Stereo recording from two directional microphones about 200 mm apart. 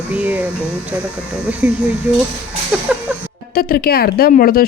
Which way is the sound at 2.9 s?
5° right (ahead or behind).